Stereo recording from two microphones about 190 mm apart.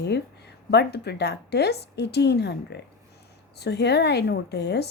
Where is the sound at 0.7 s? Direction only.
60° left (ahead or behind).